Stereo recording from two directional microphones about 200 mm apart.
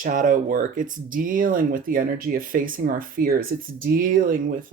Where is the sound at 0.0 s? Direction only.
40° right (ahead or behind).